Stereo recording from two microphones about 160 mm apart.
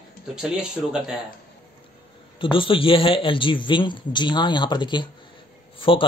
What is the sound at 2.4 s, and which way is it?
Speech, 35° left (ahead or behind).